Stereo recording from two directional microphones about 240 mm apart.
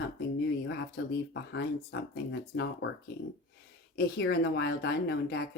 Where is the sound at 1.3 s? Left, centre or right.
Left.